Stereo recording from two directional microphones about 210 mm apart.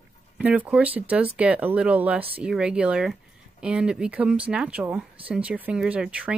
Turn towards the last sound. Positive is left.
turn(degrees=-5)  # may be behind; listen again after turning